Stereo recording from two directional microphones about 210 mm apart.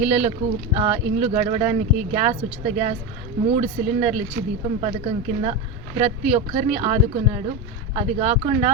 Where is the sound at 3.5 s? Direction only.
30° right (ahead or behind).